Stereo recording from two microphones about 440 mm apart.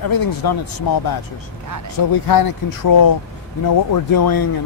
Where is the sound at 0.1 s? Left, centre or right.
Left.